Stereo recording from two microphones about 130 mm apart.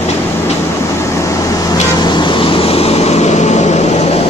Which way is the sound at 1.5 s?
30° left (ahead or behind).